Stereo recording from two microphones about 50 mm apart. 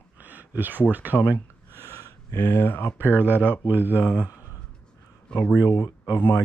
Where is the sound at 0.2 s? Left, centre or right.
Right.